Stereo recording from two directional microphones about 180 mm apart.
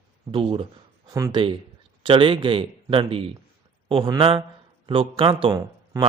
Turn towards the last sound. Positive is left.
turn(degrees=-20)  # may be behind; listen again after turning